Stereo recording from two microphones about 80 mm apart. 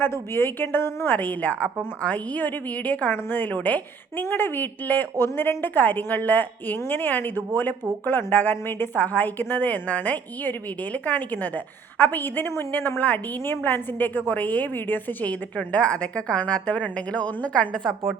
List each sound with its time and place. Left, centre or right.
0.0 s a woman's voice: left